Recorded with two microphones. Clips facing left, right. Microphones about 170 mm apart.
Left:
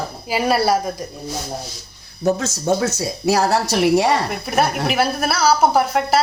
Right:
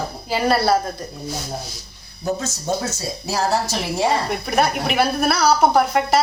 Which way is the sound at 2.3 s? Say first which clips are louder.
Left 4 dB; 80° left.